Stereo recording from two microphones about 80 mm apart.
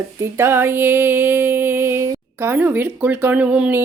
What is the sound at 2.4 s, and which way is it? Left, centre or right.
Speech, right.